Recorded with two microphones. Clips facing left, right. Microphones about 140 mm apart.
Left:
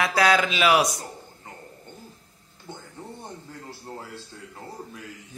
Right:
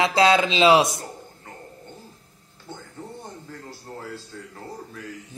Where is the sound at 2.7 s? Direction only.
15° left (ahead or behind).